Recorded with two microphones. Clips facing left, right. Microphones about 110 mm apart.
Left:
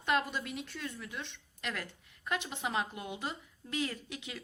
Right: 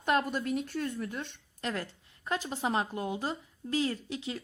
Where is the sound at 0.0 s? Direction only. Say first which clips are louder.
Right 4 dB; 45° right (ahead or behind).